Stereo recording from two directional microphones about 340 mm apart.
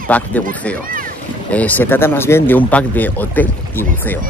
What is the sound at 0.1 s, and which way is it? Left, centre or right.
Speech, centre.